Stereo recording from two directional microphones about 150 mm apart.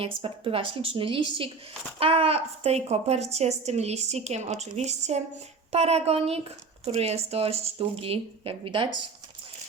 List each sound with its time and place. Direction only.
0.0 s a woman's voice: 40° right (ahead or behind)